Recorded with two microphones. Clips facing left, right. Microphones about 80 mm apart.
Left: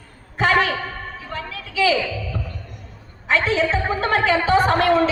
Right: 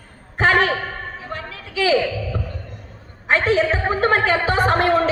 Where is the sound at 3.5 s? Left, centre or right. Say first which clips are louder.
Right 2 dB; right.